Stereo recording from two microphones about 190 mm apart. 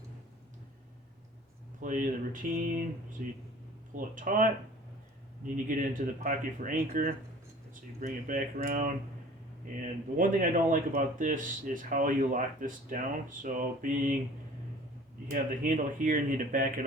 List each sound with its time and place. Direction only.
1.8 s speech: 45° right (ahead or behind)
5.6 s speech: 45° right (ahead or behind)
10.2 s speech: 45° right (ahead or behind)
15.3 s speech: 45° right (ahead or behind)